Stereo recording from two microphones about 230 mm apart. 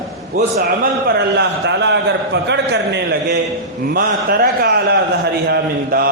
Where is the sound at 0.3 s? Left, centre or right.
Right.